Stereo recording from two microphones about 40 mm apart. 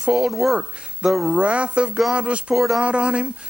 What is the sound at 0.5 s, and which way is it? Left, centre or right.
Speech, right.